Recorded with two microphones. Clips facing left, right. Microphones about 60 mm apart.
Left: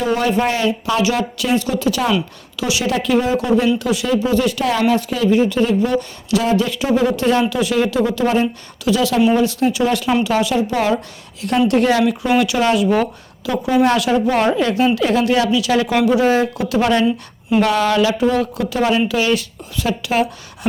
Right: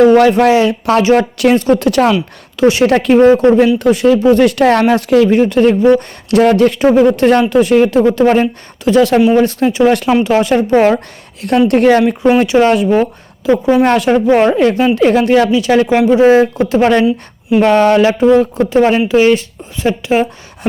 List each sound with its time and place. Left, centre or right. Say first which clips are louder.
0.0 s speech: right 10 dB; right
1.5 s a woman's voice: right 5 dB; right
1.8 s speech: right 7 dB; right
2.6 s a woman's voice: right 10 dB; right
4.1 s speech: right 6 dB; right
7.1 s a woman's voice: right 7 dB; right
9.8 s a woman's voice: right 9 dB; right
13.8 s a woman's voice: right 5 dB; right
15.9 s a woman's voice: right 8 dB; right